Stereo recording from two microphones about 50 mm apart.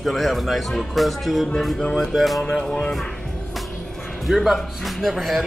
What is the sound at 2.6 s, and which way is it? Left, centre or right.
Speech, centre.